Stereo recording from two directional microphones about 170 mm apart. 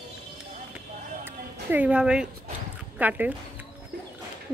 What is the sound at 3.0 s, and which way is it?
Speech, 10° right (ahead or behind).